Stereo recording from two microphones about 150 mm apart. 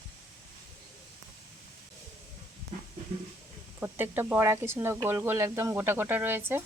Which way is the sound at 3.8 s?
10° right (ahead or behind).